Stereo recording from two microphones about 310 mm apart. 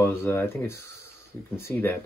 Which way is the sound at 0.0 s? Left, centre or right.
Centre.